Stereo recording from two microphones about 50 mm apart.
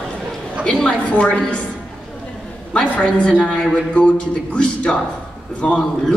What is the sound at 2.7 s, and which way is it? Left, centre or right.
A woman's voice, centre.